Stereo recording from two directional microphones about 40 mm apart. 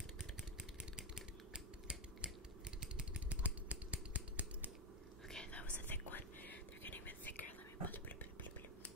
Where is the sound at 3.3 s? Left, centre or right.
Right.